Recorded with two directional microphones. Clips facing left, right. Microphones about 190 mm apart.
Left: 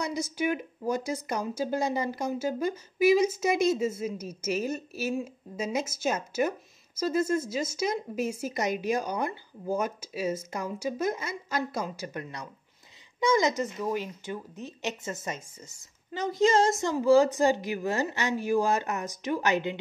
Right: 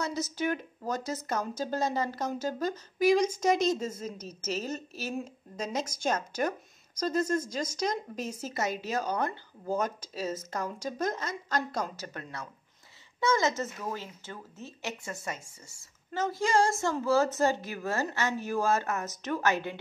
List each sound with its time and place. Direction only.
0.0 s speech: 15° left (ahead or behind)